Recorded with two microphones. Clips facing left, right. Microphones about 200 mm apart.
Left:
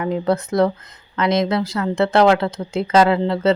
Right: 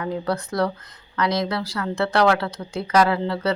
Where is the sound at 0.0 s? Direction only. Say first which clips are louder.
Left 5 dB; 20° left (ahead or behind).